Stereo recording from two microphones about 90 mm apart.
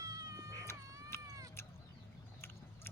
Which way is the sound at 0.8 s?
40° right (ahead or behind).